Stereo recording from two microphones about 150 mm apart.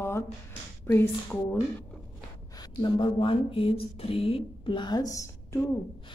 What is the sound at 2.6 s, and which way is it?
Speech, 30° left (ahead or behind).